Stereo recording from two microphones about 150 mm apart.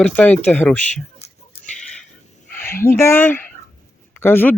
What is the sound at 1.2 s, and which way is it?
Goat, 40° left (ahead or behind).